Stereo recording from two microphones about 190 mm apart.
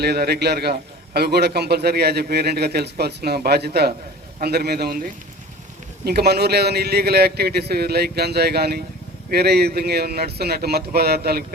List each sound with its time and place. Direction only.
0.0 s a man's voice: 60° right (ahead or behind)
6.1 s a man's voice: 55° right (ahead or behind)